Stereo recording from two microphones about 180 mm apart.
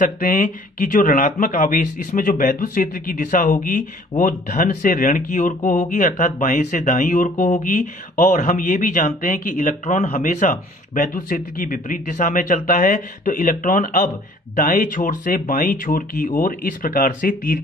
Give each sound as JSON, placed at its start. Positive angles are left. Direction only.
{"t": 0.0, "sound": "speech", "side_deg": 50}